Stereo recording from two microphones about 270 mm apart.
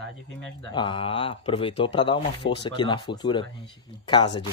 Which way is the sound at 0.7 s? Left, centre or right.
Centre.